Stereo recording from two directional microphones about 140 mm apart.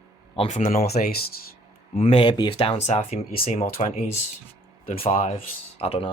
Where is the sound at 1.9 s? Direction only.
50° left (ahead or behind).